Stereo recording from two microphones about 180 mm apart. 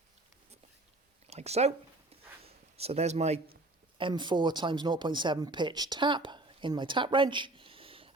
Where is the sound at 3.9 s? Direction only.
25° right (ahead or behind).